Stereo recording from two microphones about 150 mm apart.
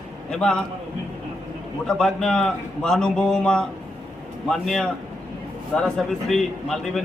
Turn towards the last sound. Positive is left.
turn(degrees=0)  # may be behind; listen again after turning